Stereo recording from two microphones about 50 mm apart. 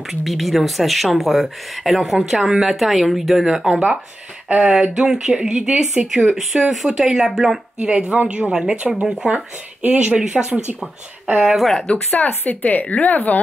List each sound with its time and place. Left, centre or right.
0.1 s speech: centre
7.8 s speech: centre
8.5 s speech: centre; by 10.8 s right
11.3 s speech: centre
11.9 s speech: centre
12.3 s speech: left